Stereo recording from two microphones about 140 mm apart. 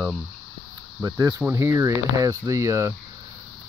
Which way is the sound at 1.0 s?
25° right (ahead or behind).